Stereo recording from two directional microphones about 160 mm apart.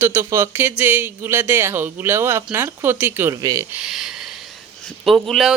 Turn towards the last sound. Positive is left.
turn(degrees=0)  # may be behind; listen again after turning